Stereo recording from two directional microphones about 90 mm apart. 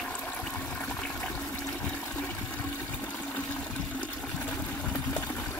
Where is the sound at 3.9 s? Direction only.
15° left (ahead or behind).